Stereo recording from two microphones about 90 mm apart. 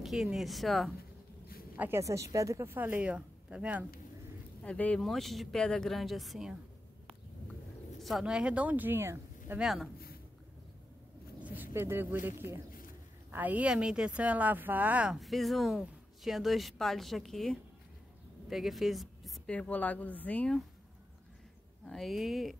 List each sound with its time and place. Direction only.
0.0 s speech: centre (ahead or behind)
1.8 s a woman's voice: 30° right (ahead or behind); by 3.8 s 15° right (ahead or behind)
4.6 s speech: 15° left (ahead or behind)
5.0 s speech: centre (ahead or behind)
8.0 s speech: centre (ahead or behind); by 9.6 s 25° right (ahead or behind)
9.6 s speech: centre (ahead or behind)
11.3 s speech: 20° right (ahead or behind)
13.3 s speech: 20° right (ahead or behind)
15.1 s a woman's voice: centre (ahead or behind)
19.4 s speech: 15° left (ahead or behind)
21.8 s speech: centre (ahead or behind)